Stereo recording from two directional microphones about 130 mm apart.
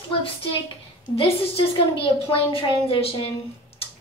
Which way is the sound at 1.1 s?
45° left (ahead or behind).